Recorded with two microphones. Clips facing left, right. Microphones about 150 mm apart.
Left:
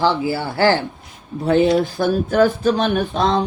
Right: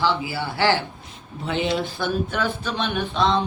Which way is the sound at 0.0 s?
45° left (ahead or behind).